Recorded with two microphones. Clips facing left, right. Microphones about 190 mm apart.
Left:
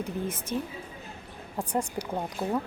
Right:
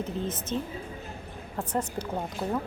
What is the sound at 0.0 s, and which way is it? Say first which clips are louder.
Speech: right 1 dB; 10° left (ahead or behind).